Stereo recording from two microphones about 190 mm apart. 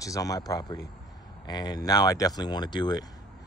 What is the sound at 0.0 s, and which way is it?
Speech, 20° left (ahead or behind).